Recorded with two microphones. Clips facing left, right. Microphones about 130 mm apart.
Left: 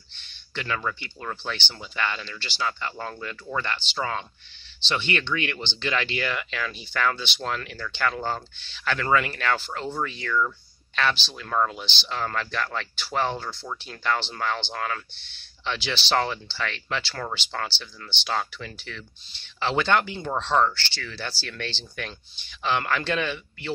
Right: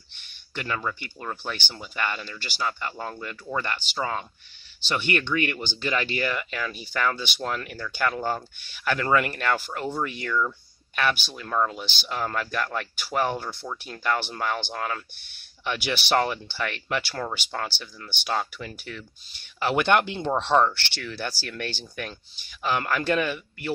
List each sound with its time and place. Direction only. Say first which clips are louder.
0.1 s a sound: left 1 dB; 10° right (ahead or behind)
1.2 s speech: even; 10° right (ahead or behind)
21.7 s speech: right 1 dB; 5° right (ahead or behind)